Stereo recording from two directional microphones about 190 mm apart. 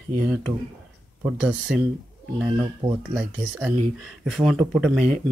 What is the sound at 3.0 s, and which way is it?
Speech, 5° right (ahead or behind).